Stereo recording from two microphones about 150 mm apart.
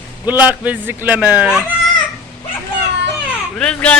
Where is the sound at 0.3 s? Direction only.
10° right (ahead or behind).